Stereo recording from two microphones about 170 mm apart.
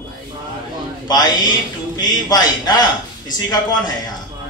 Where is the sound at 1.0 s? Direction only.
25° left (ahead or behind).